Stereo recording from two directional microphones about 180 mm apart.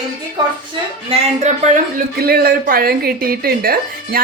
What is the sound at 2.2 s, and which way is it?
Speech, 60° right (ahead or behind).